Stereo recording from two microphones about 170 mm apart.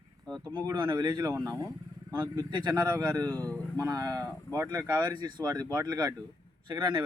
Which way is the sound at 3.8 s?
20° right (ahead or behind).